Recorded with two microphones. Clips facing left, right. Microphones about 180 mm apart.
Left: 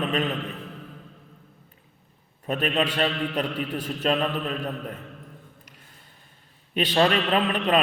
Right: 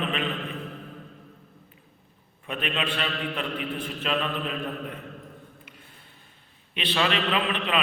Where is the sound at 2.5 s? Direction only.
40° left (ahead or behind).